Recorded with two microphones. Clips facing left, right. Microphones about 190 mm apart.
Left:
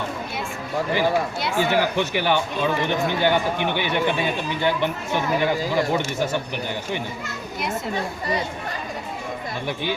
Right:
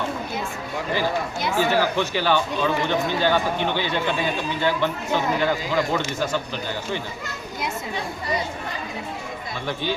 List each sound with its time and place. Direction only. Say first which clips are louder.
1.5 s speech: even; 15° left (ahead or behind)